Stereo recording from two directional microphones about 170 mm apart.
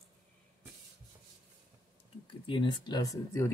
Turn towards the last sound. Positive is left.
turn(degrees=20)  # may be behind; listen again after turning